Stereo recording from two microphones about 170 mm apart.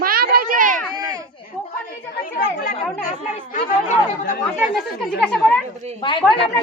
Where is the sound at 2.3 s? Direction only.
55° left (ahead or behind).